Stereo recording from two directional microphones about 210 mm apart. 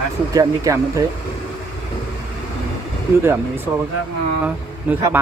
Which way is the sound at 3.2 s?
10° right (ahead or behind).